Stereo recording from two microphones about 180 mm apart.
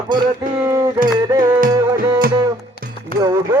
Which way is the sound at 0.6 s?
15° right (ahead or behind).